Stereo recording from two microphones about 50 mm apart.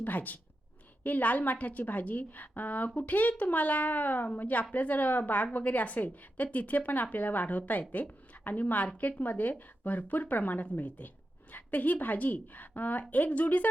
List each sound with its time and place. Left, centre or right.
0.0 s a woman's voice: left